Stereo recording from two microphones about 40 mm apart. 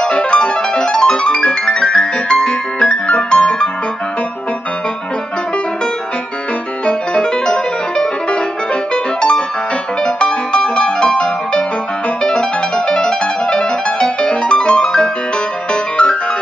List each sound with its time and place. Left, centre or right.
0.0 s music: left
6.9 s music: left